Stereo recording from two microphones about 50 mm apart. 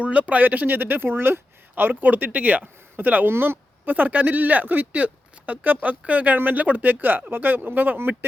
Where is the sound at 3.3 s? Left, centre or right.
Right.